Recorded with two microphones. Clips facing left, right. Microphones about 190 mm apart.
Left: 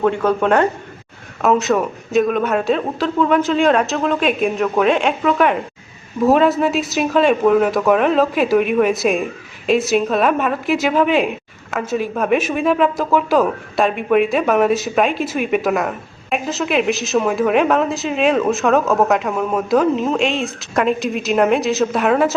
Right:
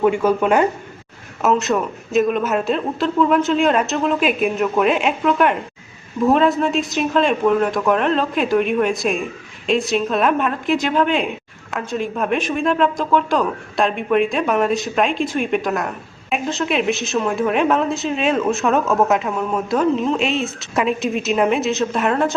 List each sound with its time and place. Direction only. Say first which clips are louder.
0.0 s a woman's voice: even; 10° right (ahead or behind)